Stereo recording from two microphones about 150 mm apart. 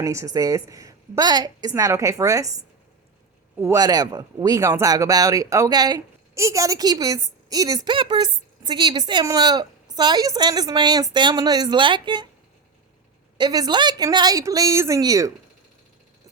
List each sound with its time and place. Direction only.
0.0 s speech: 20° right (ahead or behind)
13.3 s speech: 25° right (ahead or behind)